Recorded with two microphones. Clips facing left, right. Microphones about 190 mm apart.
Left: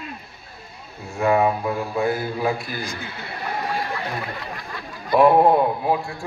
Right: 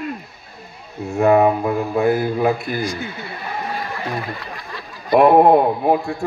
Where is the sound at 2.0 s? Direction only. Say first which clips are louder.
Right 6 dB; 20° right (ahead or behind).